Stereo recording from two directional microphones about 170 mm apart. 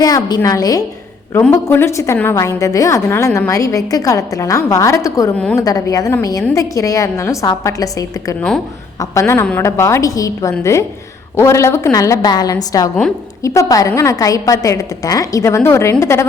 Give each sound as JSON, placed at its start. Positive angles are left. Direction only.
{"t": 0.0, "sound": "a woman's voice", "side_deg": 20}